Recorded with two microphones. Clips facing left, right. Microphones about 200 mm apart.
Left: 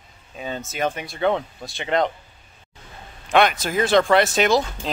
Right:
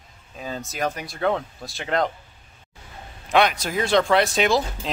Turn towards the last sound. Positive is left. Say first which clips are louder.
# left 2 dB
turn(degrees=0)  # may be behind; listen again after turning